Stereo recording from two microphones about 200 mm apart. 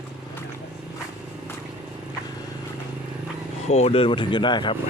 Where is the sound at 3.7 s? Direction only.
30° left (ahead or behind).